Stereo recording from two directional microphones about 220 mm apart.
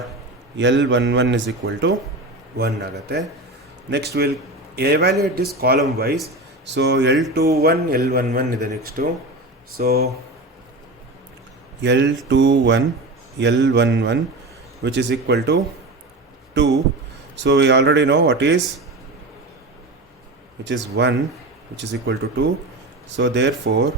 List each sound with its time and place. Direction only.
0.5 s a man's voice: 55° right (ahead or behind)
11.8 s a man's voice: 55° right (ahead or behind)
16.6 s a man's voice: 50° right (ahead or behind)
20.9 s a man's voice: 55° right (ahead or behind)